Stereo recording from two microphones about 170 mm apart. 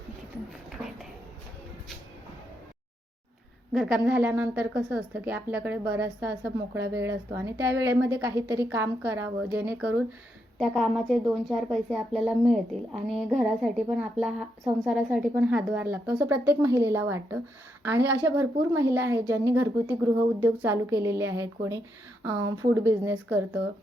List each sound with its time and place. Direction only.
3.7 s a woman's voice: centre (ahead or behind)
10.6 s a woman's voice: centre (ahead or behind)